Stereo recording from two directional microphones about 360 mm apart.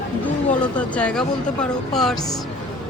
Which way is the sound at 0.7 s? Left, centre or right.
Centre.